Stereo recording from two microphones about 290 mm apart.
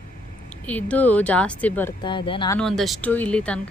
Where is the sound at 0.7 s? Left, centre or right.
Centre.